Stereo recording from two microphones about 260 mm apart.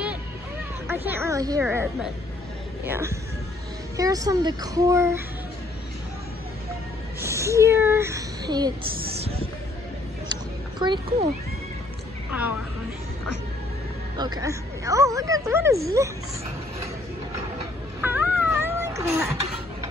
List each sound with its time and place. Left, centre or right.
0.8 s speech: centre
7.2 s a sound: centre
10.2 s a sound: centre
12.3 s a woman's voice: centre
14.1 s speech: centre
18.0 s cat: centre